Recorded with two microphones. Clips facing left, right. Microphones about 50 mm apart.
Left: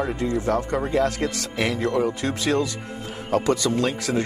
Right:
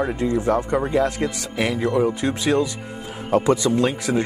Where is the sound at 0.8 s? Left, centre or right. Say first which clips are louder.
Right 2 dB; centre.